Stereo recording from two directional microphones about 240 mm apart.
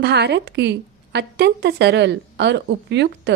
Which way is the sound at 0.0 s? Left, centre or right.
Right.